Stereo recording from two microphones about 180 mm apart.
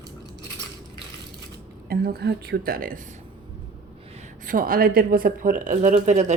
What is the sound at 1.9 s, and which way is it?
A woman's voice, 55° right (ahead or behind).